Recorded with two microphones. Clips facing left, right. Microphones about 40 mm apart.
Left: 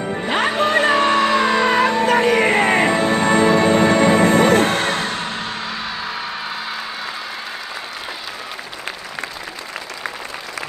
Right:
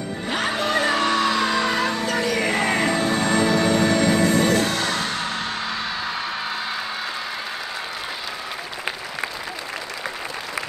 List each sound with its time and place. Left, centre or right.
0.1 s music: left
5.6 s music: centre